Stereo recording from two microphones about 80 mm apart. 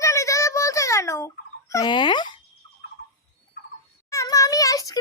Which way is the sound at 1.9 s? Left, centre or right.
Left.